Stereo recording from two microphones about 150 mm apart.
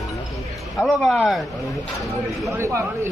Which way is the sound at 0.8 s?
Centre (ahead or behind).